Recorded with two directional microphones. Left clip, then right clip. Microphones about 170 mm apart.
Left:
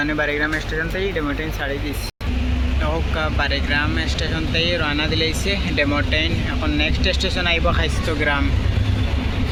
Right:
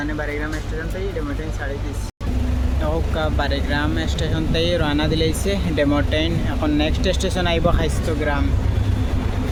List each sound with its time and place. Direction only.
0.0 s speech: 25° left (ahead or behind)
3.2 s speech: 25° right (ahead or behind)